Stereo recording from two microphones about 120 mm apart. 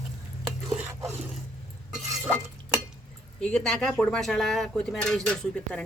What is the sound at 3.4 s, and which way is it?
Speech, 5° left (ahead or behind).